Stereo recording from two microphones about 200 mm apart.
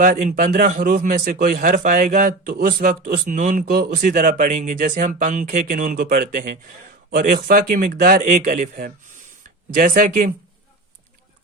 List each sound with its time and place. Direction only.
0.0 s a man's voice: 40° right (ahead or behind)